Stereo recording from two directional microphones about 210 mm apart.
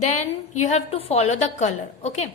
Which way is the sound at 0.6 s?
30° left (ahead or behind).